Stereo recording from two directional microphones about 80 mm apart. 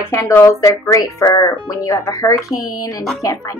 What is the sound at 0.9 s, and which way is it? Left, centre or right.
A child's voice, left.